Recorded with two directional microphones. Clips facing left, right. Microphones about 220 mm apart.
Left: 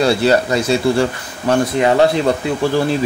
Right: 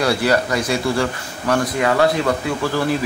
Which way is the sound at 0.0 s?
25° left (ahead or behind).